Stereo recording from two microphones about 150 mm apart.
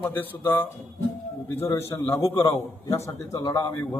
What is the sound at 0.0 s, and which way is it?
A man's voice, 15° left (ahead or behind).